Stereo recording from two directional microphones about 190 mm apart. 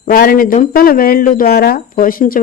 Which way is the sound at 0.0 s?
50° left (ahead or behind).